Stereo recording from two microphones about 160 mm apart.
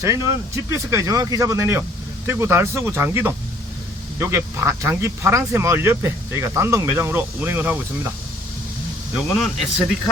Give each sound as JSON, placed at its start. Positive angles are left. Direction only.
{"t": 0.0, "sound": "speech", "side_deg": -20}
{"t": 9.4, "sound": "speech", "side_deg": 0}